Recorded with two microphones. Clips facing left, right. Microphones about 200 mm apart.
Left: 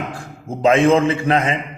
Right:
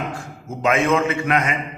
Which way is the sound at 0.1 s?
30° left (ahead or behind).